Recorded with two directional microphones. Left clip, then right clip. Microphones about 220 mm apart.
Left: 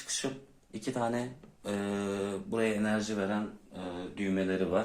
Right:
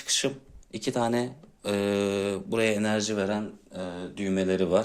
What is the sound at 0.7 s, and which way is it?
Speech, 35° right (ahead or behind).